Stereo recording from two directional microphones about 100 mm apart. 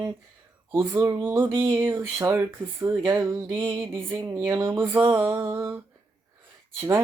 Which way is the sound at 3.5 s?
55° right (ahead or behind).